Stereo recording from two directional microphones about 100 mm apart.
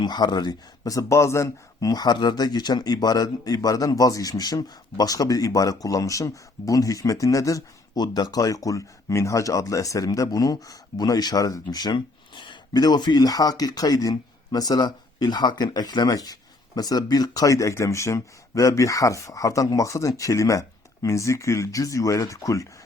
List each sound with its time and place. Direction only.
0.0 s speech: 45° left (ahead or behind)